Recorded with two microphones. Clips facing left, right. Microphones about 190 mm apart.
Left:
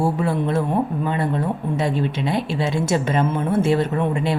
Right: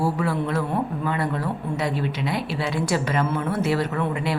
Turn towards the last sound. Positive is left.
turn(degrees=25)  # may be behind; listen again after turning